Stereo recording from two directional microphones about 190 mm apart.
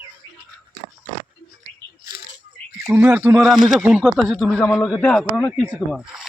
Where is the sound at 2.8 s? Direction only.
10° right (ahead or behind).